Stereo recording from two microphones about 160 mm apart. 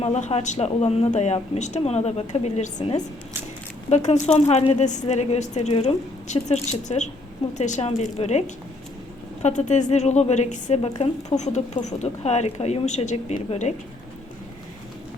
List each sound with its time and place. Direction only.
0.0 s a woman's voice: 45° left (ahead or behind)
3.8 s a woman's voice: 45° left (ahead or behind)